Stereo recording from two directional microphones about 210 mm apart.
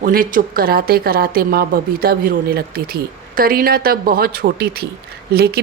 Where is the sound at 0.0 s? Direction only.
40° right (ahead or behind).